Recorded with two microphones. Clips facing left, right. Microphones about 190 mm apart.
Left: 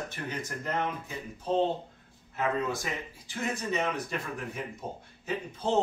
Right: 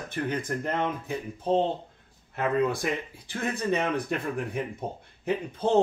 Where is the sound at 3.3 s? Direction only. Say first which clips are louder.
Right 4 dB; 60° right (ahead or behind).